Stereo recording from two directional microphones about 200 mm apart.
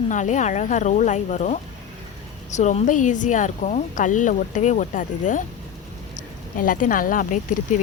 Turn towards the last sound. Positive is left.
turn(degrees=40)  # may be behind; listen again after turning